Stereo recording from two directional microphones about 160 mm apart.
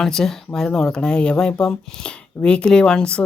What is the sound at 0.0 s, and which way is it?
Speech, 5° left (ahead or behind).